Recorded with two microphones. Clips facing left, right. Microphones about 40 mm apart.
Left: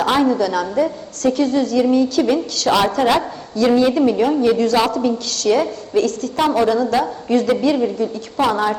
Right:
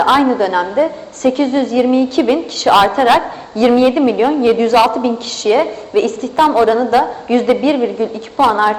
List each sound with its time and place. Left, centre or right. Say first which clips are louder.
0.0 s a woman's voice: right 5 dB; right